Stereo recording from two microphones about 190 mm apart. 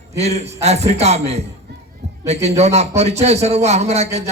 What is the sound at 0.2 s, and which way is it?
A man's voice, 35° right (ahead or behind).